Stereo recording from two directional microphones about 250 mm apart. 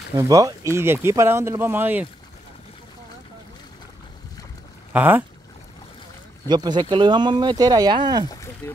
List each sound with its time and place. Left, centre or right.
0.2 s speech: centre
4.9 s speech: centre
6.5 s speech: centre
8.3 s speech: centre